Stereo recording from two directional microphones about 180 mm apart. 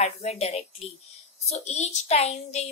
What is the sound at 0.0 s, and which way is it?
A woman's voice, 35° left (ahead or behind).